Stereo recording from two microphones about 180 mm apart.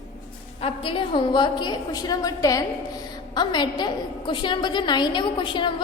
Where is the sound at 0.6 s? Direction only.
30° left (ahead or behind).